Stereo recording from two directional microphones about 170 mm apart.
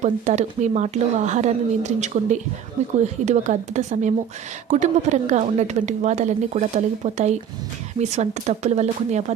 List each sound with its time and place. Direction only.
0.0 s a woman's voice: 45° right (ahead or behind)